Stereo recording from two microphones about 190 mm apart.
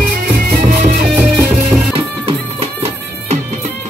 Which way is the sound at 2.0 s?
30° right (ahead or behind).